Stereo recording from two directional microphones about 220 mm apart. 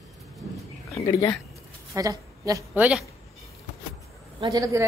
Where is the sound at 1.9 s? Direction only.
15° right (ahead or behind).